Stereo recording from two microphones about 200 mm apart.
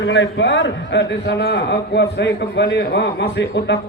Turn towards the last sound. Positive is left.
turn(degrees=60)  # may be behind; listen again after turning